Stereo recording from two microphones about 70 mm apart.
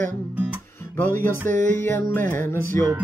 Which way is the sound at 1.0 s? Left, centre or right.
Left.